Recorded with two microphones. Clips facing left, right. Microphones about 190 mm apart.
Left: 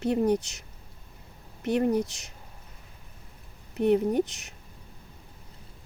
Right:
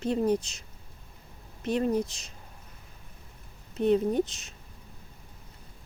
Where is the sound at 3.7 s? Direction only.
15° left (ahead or behind).